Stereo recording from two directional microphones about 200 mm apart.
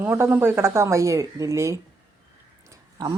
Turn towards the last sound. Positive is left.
turn(degrees=-15)  # may be behind; listen again after turning